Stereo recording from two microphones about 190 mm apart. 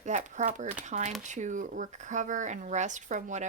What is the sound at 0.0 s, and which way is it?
Speech, 40° right (ahead or behind).